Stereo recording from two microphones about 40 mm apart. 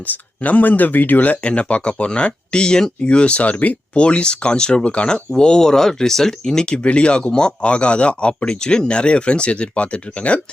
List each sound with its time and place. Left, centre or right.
0.0 s speech: left
1.4 s speech: left
6.8 s speech: left